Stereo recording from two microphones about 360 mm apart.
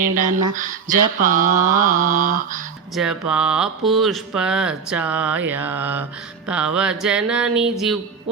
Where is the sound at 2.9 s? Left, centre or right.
Centre.